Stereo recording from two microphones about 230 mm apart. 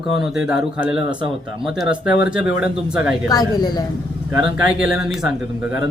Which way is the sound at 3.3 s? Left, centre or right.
Centre.